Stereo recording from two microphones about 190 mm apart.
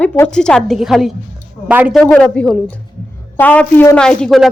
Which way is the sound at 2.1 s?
5° left (ahead or behind).